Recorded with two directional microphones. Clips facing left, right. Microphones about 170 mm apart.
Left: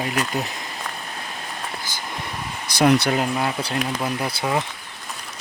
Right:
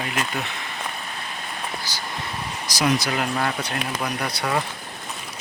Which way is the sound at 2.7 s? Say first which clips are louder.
Left 5 dB; 60° left (ahead or behind).